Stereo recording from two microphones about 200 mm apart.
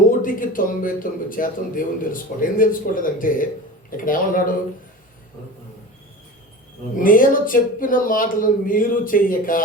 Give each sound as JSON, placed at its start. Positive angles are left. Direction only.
{"t": 0.2, "sound": "speech", "side_deg": 45}
{"t": 7.0, "sound": "speech", "side_deg": 45}